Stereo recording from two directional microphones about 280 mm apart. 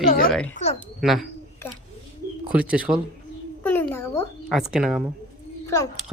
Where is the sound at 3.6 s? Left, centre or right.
Centre.